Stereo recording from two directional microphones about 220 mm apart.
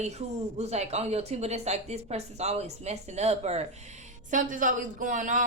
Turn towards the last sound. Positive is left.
turn(degrees=-35)  # may be behind; listen again after turning